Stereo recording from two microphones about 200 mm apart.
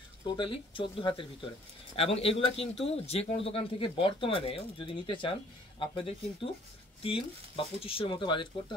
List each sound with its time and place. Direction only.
0.4 s speech: 25° left (ahead or behind)